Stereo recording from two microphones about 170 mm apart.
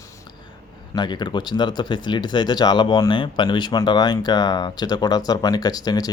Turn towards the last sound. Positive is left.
turn(degrees=20)  # may be behind; listen again after turning